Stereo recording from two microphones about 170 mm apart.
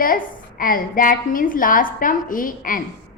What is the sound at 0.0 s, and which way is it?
A woman's voice, 55° left (ahead or behind).